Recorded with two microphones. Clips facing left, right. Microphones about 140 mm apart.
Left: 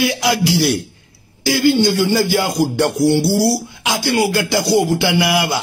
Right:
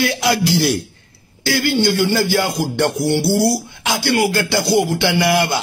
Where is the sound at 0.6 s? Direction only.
Centre (ahead or behind).